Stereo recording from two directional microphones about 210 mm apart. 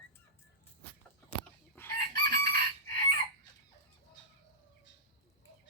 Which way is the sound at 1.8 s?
10° left (ahead or behind).